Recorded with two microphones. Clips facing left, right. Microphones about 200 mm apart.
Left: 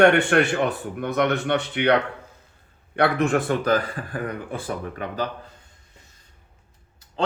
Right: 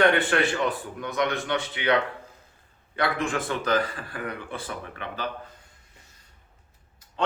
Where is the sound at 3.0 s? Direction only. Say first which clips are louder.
Left 6 dB; 65° left (ahead or behind); by 5.3 s 40° left (ahead or behind).